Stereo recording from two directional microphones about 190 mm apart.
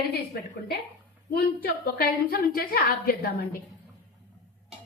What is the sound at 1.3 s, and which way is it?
A woman's voice, 50° left (ahead or behind).